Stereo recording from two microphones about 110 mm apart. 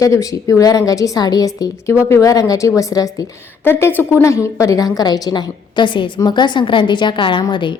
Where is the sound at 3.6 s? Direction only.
20° left (ahead or behind).